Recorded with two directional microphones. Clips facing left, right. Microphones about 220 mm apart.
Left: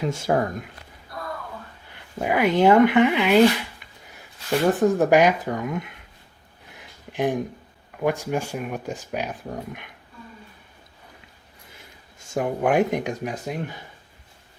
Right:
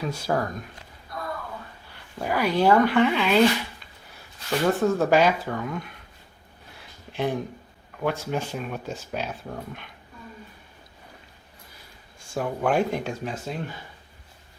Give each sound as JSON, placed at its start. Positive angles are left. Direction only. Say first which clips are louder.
{"t": 0.0, "sound": "speech", "louder": "left 4 dB", "side_deg": 20}
{"t": 2.1, "sound": "speech", "louder": "left 3 dB", "side_deg": 20}
{"t": 4.6, "sound": "speech", "louder": "left 2 dB", "side_deg": 15}
{"t": 6.7, "sound": "a sound", "louder": "left 3 dB", "side_deg": 15}
{"t": 8.0, "sound": "speech", "louder": "left 3 dB", "side_deg": 15}
{"t": 12.3, "sound": "speech", "louder": "left 3 dB", "side_deg": 20}